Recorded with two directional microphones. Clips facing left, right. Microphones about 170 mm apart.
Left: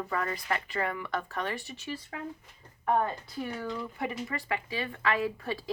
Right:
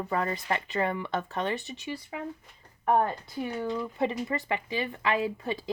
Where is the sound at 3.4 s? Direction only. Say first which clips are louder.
Right 4 dB; 20° right (ahead or behind).